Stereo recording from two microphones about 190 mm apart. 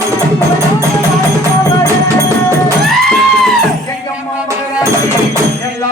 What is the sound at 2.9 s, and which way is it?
Music, centre (ahead or behind).